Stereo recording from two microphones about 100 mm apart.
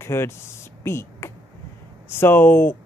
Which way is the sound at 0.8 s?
25° left (ahead or behind).